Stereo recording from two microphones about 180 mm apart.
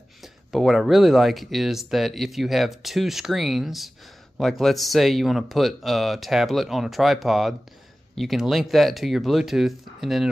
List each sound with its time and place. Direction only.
0.2 s speech: centre (ahead or behind)